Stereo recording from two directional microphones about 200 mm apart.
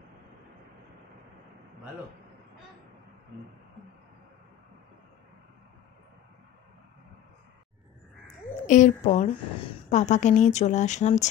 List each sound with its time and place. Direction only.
8.6 s a woman's voice: 40° left (ahead or behind)